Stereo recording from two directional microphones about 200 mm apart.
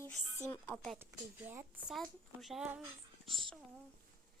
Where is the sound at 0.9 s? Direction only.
10° right (ahead or behind).